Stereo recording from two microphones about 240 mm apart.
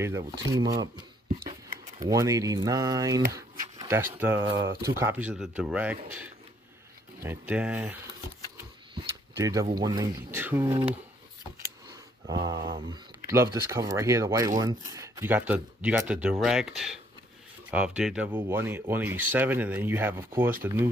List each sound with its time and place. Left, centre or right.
0.0 s speech: centre
2.0 s speech: centre
8.9 s a sound: centre
9.8 s speech: centre
12.3 s speech: centre